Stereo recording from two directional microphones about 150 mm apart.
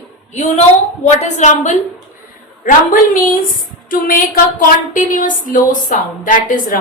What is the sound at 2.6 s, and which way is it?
A woman's voice, 65° left (ahead or behind).